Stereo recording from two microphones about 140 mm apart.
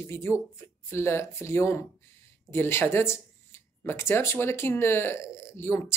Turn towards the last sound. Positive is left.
turn(degrees=20)  # may be behind; listen again after turning